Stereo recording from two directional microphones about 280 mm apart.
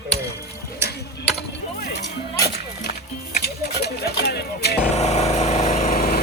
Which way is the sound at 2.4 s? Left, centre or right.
Left.